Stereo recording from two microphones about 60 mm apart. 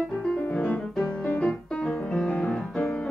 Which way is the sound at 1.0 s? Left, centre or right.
Left.